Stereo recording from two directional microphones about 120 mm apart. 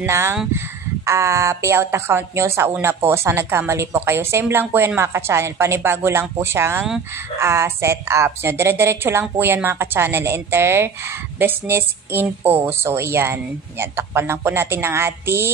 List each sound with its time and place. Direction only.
0.0 s speech: 20° right (ahead or behind)